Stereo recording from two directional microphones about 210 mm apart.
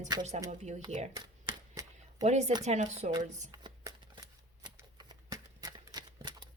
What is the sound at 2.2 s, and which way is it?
Speech, 35° right (ahead or behind).